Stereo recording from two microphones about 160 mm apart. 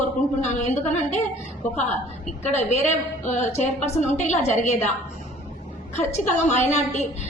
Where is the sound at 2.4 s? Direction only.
45° left (ahead or behind).